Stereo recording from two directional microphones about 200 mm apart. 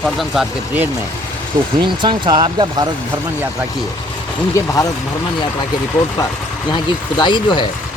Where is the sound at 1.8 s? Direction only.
25° right (ahead or behind).